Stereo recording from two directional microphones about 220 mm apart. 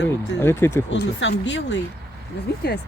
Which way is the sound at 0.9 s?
55° left (ahead or behind).